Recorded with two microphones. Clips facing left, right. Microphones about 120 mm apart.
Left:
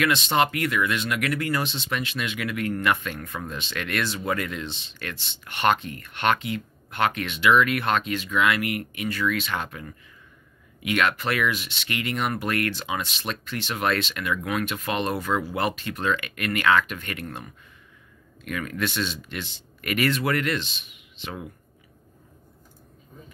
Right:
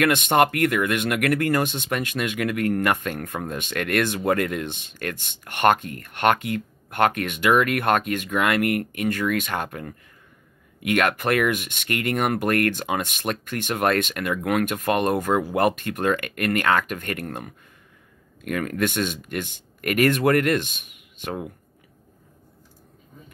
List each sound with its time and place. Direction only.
0.0 s speech: 50° right (ahead or behind)